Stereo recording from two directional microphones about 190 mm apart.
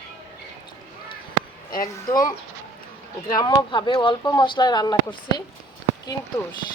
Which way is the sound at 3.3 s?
20° left (ahead or behind).